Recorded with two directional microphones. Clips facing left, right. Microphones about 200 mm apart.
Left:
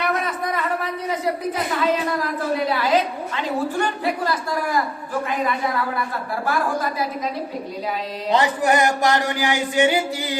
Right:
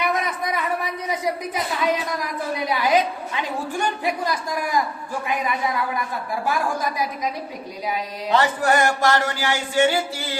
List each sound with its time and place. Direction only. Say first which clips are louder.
0.1 s speech: left 1 dB; 10° right (ahead or behind)
6.4 s a woman's voice: left 1 dB; 15° right (ahead or behind)
8.3 s a sound: left 1 dB; 15° left (ahead or behind)